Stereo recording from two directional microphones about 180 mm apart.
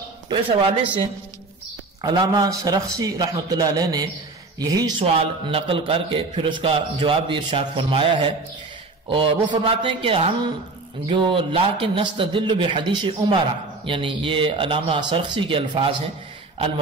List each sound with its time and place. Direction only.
0.3 s a man's voice: 30° right (ahead or behind)
2.0 s a man's voice: 20° right (ahead or behind)
9.1 s a man's voice: 30° right (ahead or behind)